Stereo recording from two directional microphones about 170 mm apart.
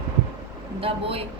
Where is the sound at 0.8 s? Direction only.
35° right (ahead or behind).